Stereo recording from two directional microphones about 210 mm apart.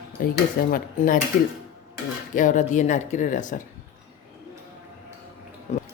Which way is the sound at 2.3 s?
40° left (ahead or behind).